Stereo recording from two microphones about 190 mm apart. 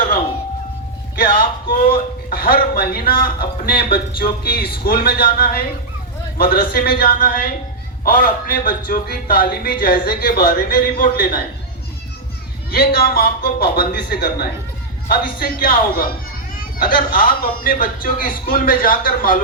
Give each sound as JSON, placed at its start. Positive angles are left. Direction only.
{"t": 1.2, "sound": "speech", "side_deg": 50}
{"t": 12.7, "sound": "speech", "side_deg": 50}